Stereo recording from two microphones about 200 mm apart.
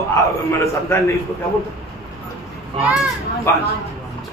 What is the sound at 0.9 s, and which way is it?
Speech, 10° left (ahead or behind).